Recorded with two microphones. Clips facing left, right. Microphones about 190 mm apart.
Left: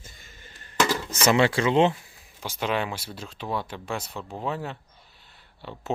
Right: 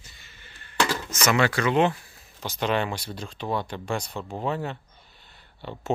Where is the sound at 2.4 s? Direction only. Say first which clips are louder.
Right 2 dB; 10° left (ahead or behind).